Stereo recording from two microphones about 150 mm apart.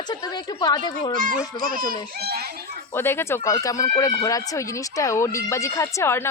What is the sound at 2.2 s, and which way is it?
Speech, 90° right.